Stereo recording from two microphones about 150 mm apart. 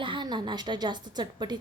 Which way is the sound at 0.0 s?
30° right (ahead or behind).